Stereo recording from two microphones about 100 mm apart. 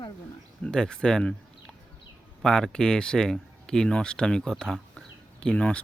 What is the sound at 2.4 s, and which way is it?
Speech, 5° left (ahead or behind).